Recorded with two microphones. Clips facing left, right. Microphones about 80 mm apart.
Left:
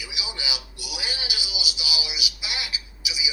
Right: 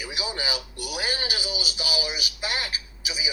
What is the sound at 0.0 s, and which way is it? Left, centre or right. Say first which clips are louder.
Music: right 4 dB; right.